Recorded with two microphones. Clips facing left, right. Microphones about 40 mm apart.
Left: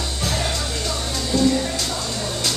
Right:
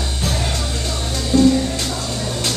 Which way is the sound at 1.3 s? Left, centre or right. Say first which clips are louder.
Right 5 dB; right.